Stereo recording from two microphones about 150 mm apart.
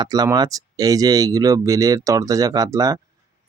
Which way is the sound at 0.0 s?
25° right (ahead or behind).